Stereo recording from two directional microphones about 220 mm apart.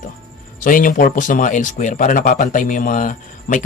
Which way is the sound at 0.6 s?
40° left (ahead or behind).